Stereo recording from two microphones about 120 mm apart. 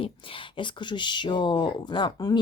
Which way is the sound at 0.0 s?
45° left (ahead or behind).